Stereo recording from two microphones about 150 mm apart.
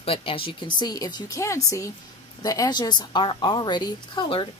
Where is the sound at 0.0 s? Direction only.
40° left (ahead or behind).